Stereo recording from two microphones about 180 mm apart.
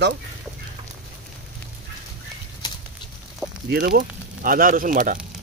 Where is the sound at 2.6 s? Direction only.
20° left (ahead or behind).